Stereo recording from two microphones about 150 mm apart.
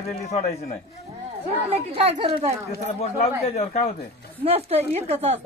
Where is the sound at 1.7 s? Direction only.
40° right (ahead or behind).